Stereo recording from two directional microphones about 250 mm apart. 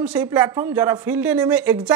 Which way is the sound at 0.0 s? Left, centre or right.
Centre.